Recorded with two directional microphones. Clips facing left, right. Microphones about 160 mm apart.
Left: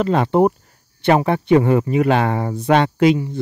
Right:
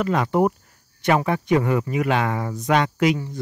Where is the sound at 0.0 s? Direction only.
30° left (ahead or behind).